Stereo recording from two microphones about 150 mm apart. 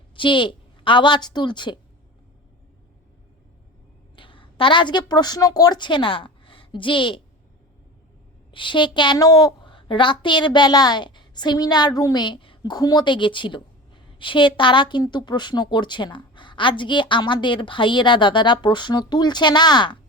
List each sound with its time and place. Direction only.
0.2 s a woman's voice: 35° left (ahead or behind)
4.1 s a woman's voice: 35° left (ahead or behind)
8.4 s a woman's voice: 35° left (ahead or behind)